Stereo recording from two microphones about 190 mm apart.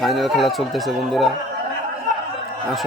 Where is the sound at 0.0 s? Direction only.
Centre (ahead or behind).